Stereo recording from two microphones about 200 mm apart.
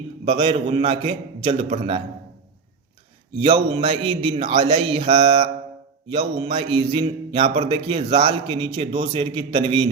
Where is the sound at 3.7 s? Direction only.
30° right (ahead or behind).